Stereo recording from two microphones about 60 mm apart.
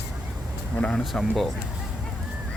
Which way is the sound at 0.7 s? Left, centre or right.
Centre.